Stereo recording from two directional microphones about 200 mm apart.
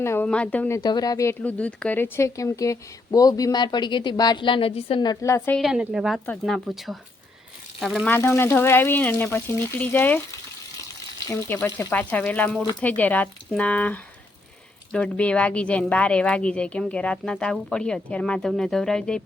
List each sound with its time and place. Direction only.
0.0 s speech: 10° left (ahead or behind)
0.8 s speech: 20° left (ahead or behind)
5.5 s a woman's voice: centre (ahead or behind)
8.1 s speech: 10° left (ahead or behind)
11.3 s a woman's voice: 15° left (ahead or behind)